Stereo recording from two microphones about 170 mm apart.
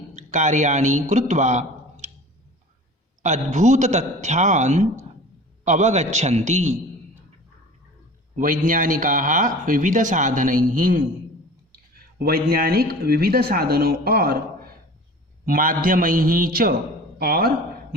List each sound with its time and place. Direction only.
0.2 s a man's voice: 45° right (ahead or behind)
3.2 s speech: 45° right (ahead or behind)
8.4 s speech: 50° right (ahead or behind)
12.2 s speech: 60° right (ahead or behind)